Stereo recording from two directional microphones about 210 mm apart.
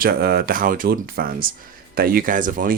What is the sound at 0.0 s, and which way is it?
Speech, 45° right (ahead or behind).